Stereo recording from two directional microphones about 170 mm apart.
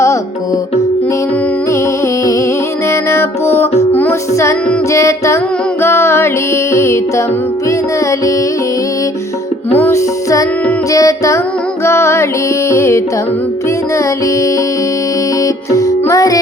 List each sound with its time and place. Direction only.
2.9 s music: 15° left (ahead or behind)
9.7 s music: 15° left (ahead or behind)
15.7 s music: 20° left (ahead or behind)